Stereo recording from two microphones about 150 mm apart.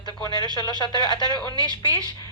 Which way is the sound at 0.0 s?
30° left (ahead or behind).